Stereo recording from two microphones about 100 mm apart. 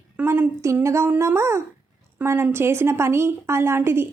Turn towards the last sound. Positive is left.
turn(degrees=-25)  # may be behind; listen again after turning